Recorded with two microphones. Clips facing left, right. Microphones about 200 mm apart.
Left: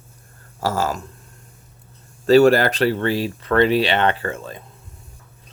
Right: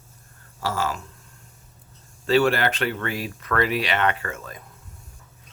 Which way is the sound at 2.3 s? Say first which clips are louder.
Left 7 dB; 40° left (ahead or behind).